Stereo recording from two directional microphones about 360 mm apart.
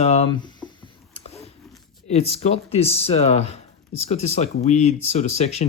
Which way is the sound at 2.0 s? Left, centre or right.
Centre.